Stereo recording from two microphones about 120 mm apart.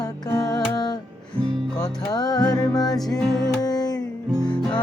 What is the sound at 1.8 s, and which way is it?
Music, 30° left (ahead or behind).